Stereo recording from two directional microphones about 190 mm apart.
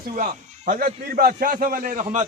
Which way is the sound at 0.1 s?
40° right (ahead or behind).